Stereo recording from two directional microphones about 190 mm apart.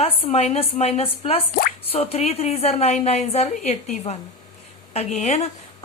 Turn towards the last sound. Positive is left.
turn(degrees=35)  # may be behind; listen again after turning